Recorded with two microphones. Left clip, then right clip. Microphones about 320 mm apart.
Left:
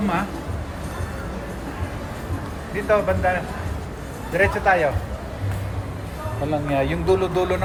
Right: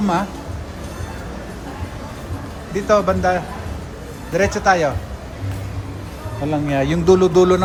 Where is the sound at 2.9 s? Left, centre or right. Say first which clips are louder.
Right 4 dB; right.